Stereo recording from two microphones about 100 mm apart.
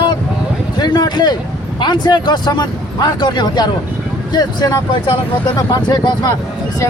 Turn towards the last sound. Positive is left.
turn(degrees=45)  # may be behind; listen again after turning